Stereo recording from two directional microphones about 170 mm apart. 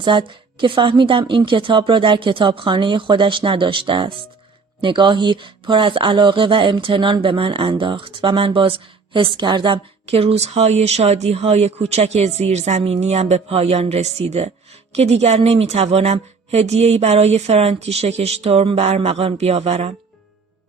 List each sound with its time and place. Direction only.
0.0 s a woman's voice: 30° right (ahead or behind)